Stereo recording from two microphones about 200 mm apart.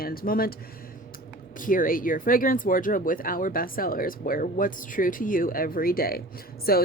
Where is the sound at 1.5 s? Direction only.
45° left (ahead or behind).